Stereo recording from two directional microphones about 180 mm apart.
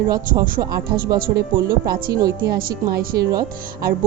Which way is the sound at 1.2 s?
55° right (ahead or behind).